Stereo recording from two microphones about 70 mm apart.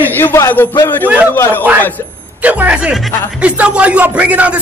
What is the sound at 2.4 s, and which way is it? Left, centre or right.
Speech, right.